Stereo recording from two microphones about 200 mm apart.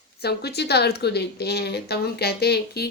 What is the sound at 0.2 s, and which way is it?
Speech, 55° left (ahead or behind).